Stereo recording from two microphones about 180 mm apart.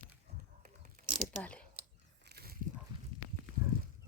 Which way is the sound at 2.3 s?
60° right (ahead or behind).